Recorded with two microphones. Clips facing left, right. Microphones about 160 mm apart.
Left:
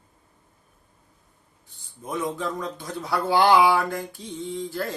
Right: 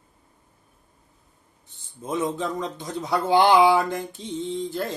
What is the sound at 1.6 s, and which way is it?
Speech, 20° right (ahead or behind).